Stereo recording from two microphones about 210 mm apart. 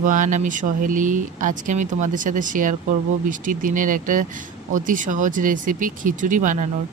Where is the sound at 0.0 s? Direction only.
40° right (ahead or behind).